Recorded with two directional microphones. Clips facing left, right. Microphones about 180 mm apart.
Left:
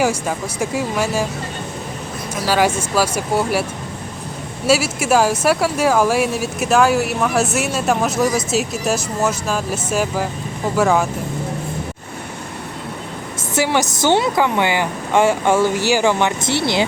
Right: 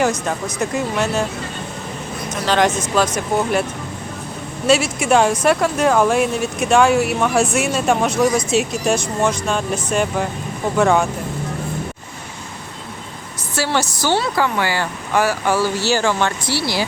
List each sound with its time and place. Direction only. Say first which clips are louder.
0.0 s speech: even; 10° left (ahead or behind)
2.3 s speech: even; 10° left (ahead or behind)
13.6 s speech: left 2 dB; 20° left (ahead or behind)